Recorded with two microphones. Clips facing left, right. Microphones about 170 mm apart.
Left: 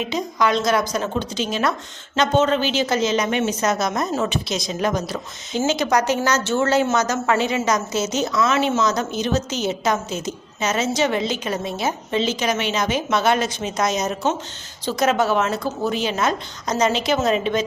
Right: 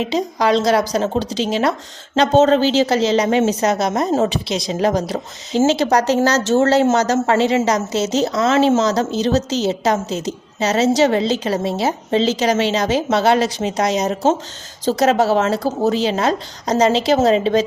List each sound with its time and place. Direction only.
0.0 s a woman's voice: 35° right (ahead or behind)